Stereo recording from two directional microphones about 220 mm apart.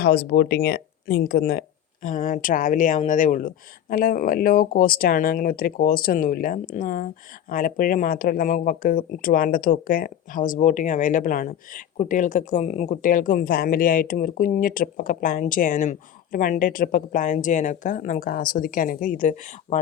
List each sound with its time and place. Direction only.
0.0 s speech: 45° left (ahead or behind)